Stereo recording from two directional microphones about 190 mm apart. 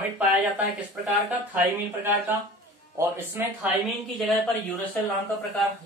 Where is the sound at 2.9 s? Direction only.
10° right (ahead or behind).